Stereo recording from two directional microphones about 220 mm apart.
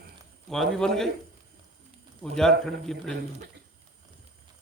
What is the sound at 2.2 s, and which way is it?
Speech, centre (ahead or behind).